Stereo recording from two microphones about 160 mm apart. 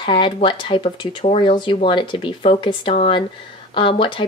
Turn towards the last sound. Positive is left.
turn(degrees=30)  # may be behind; listen again after turning